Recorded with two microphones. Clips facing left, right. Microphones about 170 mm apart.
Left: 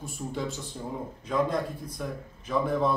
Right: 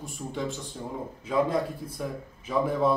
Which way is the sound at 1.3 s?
5° right (ahead or behind).